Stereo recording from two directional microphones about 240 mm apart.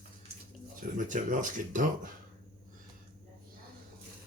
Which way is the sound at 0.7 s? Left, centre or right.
Right.